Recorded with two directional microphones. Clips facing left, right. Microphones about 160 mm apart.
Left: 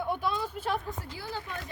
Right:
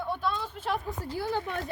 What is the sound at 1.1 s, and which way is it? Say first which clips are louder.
Speech: right 12 dB; 50° right (ahead or behind).